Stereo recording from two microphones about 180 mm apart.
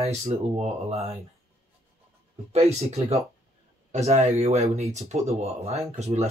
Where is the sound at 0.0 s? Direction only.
35° right (ahead or behind).